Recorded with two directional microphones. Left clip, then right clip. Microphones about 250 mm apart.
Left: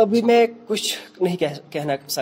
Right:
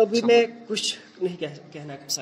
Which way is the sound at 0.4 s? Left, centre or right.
Left.